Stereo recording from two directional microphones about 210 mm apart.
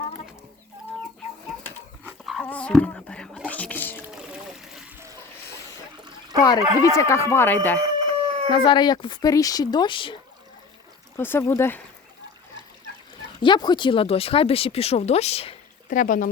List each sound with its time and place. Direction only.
2.0 s biting: centre (ahead or behind)
4.6 s water: centre (ahead or behind)
6.8 s speech: 15° left (ahead or behind)
7.8 s chicken: 25° right (ahead or behind)
8.4 s speech: 20° left (ahead or behind)
11.2 s speech: 10° left (ahead or behind)
13.4 s speech: 20° left (ahead or behind)
15.9 s speech: 40° left (ahead or behind)